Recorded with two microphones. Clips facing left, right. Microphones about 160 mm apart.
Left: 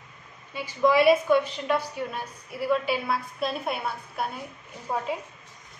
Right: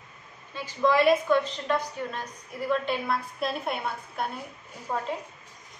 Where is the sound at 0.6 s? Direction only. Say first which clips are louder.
Left 2 dB; 10° left (ahead or behind).